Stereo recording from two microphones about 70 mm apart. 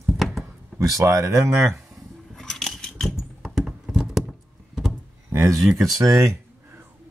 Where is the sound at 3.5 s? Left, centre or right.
Centre.